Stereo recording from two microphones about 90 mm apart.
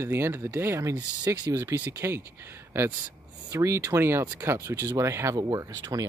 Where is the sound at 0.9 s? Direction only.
45° right (ahead or behind).